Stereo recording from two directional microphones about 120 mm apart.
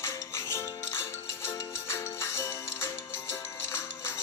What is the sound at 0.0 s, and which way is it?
Music, 25° left (ahead or behind).